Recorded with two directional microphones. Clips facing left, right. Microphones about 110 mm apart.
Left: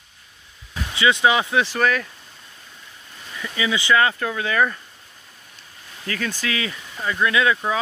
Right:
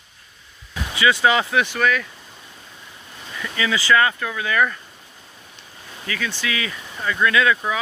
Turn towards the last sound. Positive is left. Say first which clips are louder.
# right 1 dB
turn(degrees=25)  # may be behind; listen again after turning